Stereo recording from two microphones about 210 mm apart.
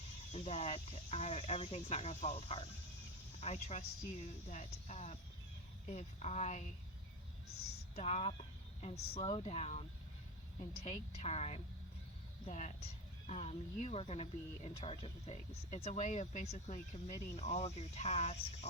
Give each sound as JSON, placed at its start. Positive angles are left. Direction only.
{"t": 0.3, "sound": "speech", "side_deg": 30}
{"t": 7.4, "sound": "speech", "side_deg": 90}
{"t": 7.9, "sound": "speech", "side_deg": 30}
{"t": 10.8, "sound": "speech", "side_deg": 35}